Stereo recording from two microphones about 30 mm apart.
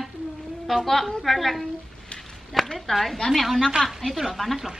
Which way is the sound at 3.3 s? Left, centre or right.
Centre.